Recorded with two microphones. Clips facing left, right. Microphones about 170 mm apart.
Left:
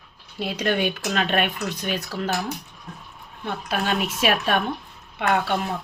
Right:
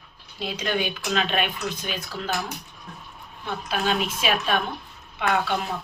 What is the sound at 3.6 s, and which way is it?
Speech, 60° left (ahead or behind).